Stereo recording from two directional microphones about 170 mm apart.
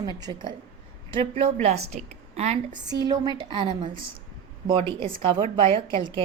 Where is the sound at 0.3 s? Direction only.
35° right (ahead or behind).